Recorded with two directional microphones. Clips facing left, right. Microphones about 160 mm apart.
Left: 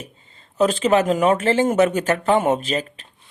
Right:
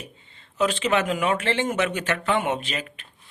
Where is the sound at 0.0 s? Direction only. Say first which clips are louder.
Left 3 dB; 40° left (ahead or behind).